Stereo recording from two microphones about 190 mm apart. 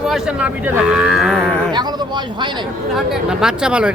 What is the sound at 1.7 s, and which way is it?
Speech, 25° right (ahead or behind).